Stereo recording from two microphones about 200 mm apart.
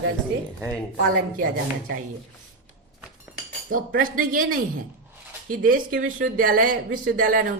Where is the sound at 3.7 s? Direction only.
45° right (ahead or behind).